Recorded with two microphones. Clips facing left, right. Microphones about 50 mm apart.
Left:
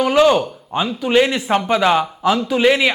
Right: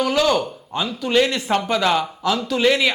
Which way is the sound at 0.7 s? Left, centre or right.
Left.